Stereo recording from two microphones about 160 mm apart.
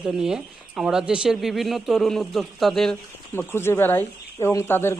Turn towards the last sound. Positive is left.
turn(degrees=15)  # may be behind; listen again after turning